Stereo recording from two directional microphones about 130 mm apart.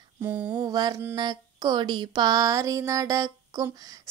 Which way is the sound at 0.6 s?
30° right (ahead or behind).